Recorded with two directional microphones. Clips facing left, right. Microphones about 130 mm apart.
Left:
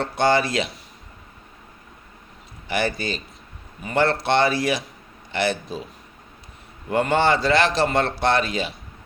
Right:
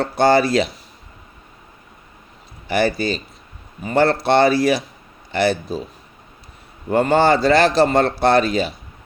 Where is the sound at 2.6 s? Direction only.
35° right (ahead or behind).